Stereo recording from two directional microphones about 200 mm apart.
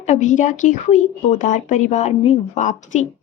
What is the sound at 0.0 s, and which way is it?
Speech, 35° left (ahead or behind).